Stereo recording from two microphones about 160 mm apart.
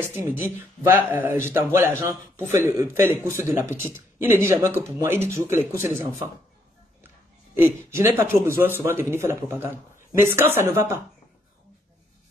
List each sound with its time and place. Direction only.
0.1 s a man's voice: 15° right (ahead or behind)
7.5 s a man's voice: 15° right (ahead or behind)